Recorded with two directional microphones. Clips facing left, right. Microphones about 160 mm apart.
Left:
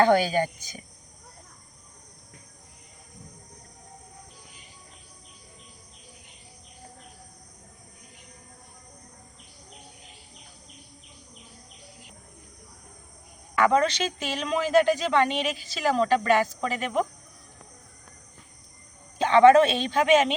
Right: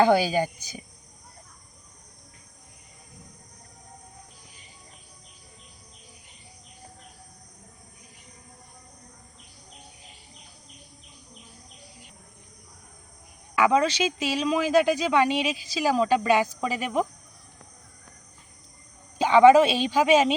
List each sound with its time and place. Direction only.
0.0 s speech: 10° right (ahead or behind)
13.6 s speech: 5° right (ahead or behind)
19.2 s speech: 10° right (ahead or behind)